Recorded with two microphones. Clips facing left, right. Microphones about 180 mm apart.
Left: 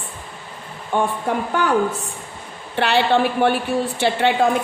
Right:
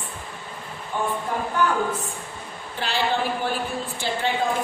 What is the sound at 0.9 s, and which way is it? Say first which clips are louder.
Speech: left 7 dB; 80° left.